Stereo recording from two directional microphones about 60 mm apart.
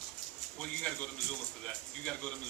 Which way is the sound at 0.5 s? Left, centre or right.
Centre.